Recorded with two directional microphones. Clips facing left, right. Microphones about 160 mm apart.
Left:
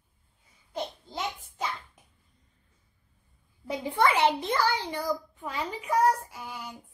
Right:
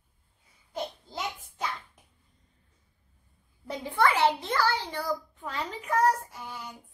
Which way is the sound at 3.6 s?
10° left (ahead or behind).